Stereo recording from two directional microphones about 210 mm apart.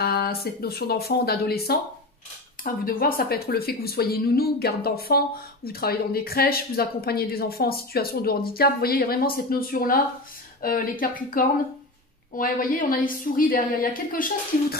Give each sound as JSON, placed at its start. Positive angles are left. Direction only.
{"t": 0.0, "sound": "a woman's voice", "side_deg": 45}